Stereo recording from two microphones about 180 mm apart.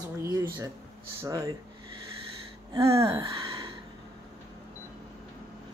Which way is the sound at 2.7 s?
20° right (ahead or behind).